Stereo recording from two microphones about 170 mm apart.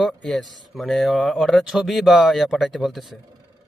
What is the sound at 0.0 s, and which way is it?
Speech, 5° left (ahead or behind).